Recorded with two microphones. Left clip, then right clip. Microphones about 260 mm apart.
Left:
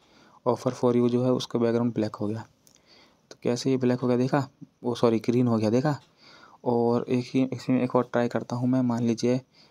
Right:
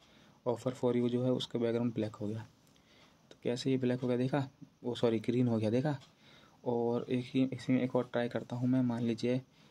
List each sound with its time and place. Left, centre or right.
0.4 s speech: left